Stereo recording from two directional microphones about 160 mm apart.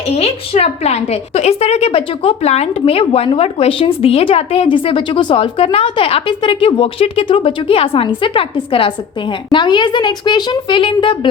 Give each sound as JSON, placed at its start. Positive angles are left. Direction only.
{"t": 0.2, "sound": "a woman's voice", "side_deg": 40}